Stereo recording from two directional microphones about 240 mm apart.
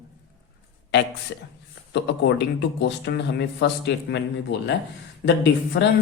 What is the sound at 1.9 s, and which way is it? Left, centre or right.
A man's voice, left.